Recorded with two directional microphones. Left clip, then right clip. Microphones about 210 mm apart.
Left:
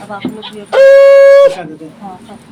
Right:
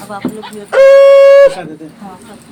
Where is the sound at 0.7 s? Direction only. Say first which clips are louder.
Even; 15° right (ahead or behind).